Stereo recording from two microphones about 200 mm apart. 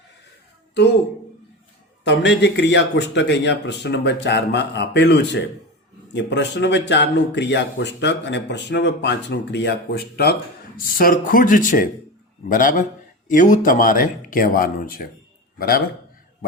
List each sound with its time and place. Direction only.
2.0 s a man's voice: 60° left (ahead or behind)